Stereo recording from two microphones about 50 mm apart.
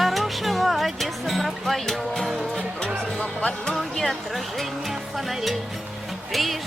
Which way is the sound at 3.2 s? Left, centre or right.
Left.